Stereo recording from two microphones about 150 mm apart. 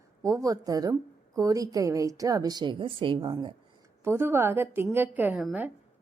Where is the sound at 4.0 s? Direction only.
15° right (ahead or behind).